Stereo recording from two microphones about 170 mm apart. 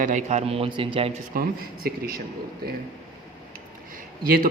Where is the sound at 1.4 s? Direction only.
55° right (ahead or behind).